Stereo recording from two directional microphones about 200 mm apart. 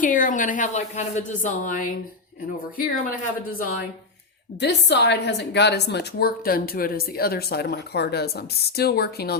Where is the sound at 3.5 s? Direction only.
45° left (ahead or behind).